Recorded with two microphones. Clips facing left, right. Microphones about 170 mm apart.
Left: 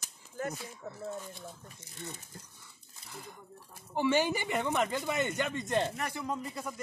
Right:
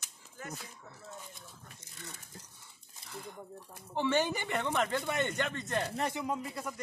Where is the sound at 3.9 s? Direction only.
10° left (ahead or behind).